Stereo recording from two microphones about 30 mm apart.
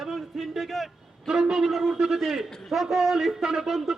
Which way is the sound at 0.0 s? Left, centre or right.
Centre.